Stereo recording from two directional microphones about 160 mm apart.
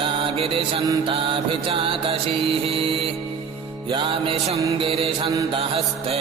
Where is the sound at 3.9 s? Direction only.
35° right (ahead or behind).